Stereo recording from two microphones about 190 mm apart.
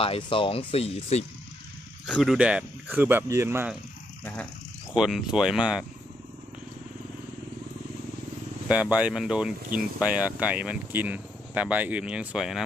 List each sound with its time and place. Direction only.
0.0 s speech: 30° left (ahead or behind)
2.0 s speech: 5° right (ahead or behind)
4.2 s speech: 5° left (ahead or behind)
4.9 s speech: 5° right (ahead or behind)
8.6 s speech: 5° right (ahead or behind)